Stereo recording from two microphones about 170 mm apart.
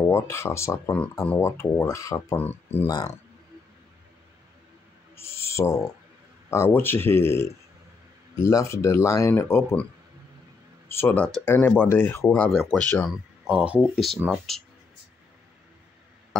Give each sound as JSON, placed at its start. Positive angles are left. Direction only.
{"t": 0.0, "sound": "speech", "side_deg": 15}
{"t": 5.1, "sound": "owl", "side_deg": 15}
{"t": 6.5, "sound": "speech", "side_deg": 15}
{"t": 10.9, "sound": "speech", "side_deg": 10}
{"t": 13.5, "sound": "speech", "side_deg": -5}